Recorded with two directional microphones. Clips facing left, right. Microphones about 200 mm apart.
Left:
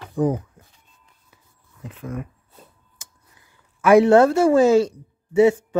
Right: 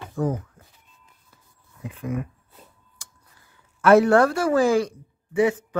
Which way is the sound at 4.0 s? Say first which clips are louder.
Left 4 dB; 25° left (ahead or behind).